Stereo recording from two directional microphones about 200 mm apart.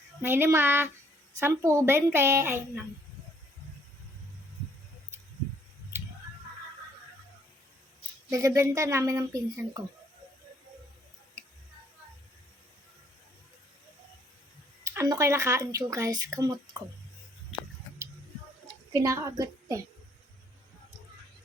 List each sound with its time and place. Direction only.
0.2 s speech: 10° right (ahead or behind)
8.3 s speech: 15° right (ahead or behind)
14.9 s speech: 15° right (ahead or behind)
18.9 s speech: 15° right (ahead or behind)